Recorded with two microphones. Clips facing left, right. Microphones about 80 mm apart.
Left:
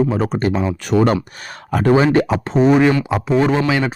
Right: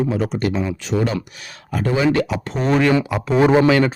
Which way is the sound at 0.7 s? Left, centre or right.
Left.